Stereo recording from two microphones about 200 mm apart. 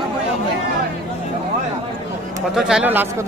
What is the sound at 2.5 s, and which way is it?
Speech, 5° right (ahead or behind).